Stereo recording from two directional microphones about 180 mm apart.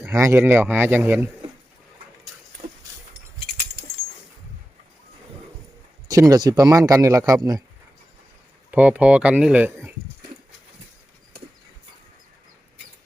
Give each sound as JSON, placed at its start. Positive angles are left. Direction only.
{"t": 0.0, "sound": "a man's voice", "side_deg": -15}
{"t": 6.1, "sound": "speech", "side_deg": -20}
{"t": 8.7, "sound": "a man's voice", "side_deg": -10}